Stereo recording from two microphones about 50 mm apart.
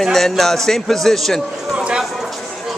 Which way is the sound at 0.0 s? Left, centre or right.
Centre.